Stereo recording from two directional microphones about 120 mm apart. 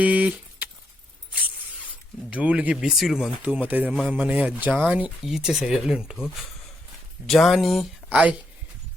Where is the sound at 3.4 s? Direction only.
15° right (ahead or behind).